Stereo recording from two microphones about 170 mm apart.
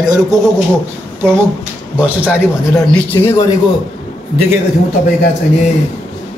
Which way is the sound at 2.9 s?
15° left (ahead or behind).